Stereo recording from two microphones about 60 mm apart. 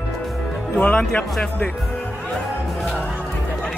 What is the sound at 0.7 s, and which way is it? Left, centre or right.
Speech, left.